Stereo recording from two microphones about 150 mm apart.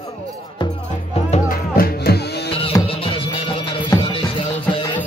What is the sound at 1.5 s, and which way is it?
Music, 80° left.